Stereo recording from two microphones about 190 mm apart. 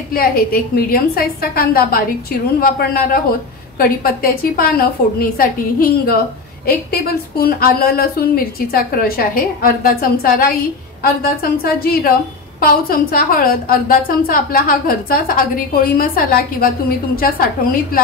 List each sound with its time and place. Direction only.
0.1 s a woman's voice: 50° left (ahead or behind)